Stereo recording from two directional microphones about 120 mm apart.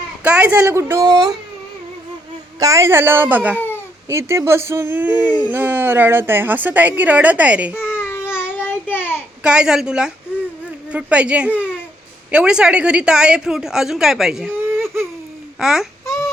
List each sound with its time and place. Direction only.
0.2 s a woman's voice: 10° right (ahead or behind)
0.6 s speech: 20° right (ahead or behind)
1.1 s speech: 35° right (ahead or behind)
2.6 s a woman's voice: 25° right (ahead or behind)
7.8 s baby cry: 20° left (ahead or behind)
8.3 s child singing: 20° left (ahead or behind)
9.4 s a woman's voice: 5° right (ahead or behind)
15.5 s babbling: 5° right (ahead or behind)